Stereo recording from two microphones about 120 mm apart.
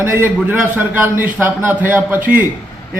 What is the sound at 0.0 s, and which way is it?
A man's voice, 15° right (ahead or behind).